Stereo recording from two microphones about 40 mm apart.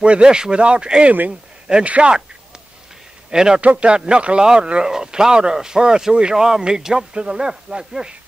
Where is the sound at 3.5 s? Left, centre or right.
Right.